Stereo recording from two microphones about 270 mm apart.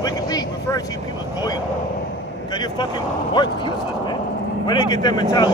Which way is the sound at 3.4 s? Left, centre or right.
Centre.